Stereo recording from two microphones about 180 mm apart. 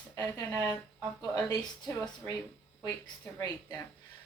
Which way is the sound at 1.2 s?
20° left (ahead or behind).